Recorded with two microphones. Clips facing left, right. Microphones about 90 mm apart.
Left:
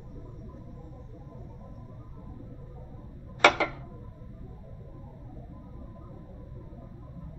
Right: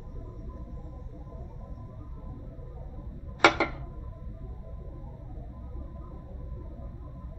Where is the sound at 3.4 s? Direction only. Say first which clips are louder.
Even; 15° right (ahead or behind).